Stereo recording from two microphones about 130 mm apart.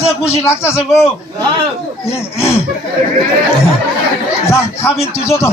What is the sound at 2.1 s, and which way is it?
Speech, 20° left (ahead or behind).